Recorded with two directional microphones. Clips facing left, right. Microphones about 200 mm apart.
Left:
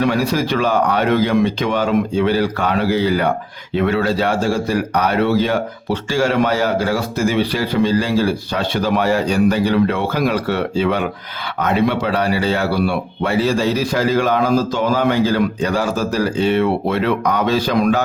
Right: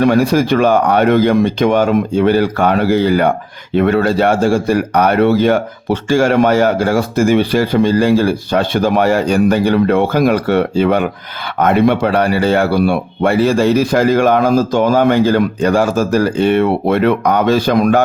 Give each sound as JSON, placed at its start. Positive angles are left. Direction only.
{"t": 0.0, "sound": "speech", "side_deg": -50}